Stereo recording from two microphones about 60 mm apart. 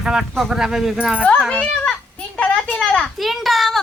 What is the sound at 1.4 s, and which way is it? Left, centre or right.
A child's voice, centre.